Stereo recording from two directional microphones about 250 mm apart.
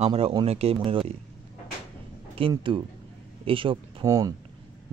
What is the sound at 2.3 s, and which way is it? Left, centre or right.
Speech, right.